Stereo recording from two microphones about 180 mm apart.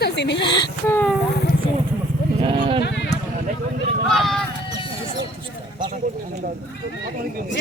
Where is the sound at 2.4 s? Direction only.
30° right (ahead or behind).